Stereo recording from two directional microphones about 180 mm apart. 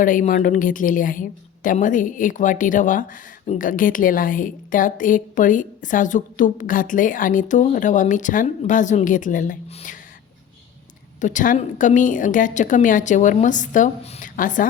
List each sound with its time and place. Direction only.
0.0 s a woman's voice: 45° left (ahead or behind)
11.2 s a woman's voice: 45° left (ahead or behind)